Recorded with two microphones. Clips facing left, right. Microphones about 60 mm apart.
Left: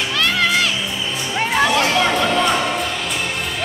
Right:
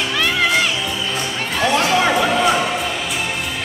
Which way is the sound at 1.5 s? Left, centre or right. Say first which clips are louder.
Even; left.